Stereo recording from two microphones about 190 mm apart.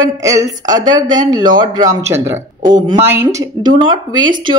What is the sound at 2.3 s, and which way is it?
Speech, 40° right (ahead or behind).